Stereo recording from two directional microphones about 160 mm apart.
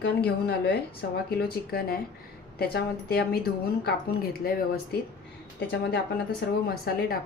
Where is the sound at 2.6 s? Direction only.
85° left.